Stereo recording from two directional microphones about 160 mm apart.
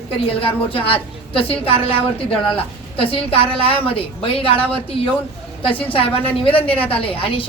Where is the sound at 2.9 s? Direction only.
35° left (ahead or behind).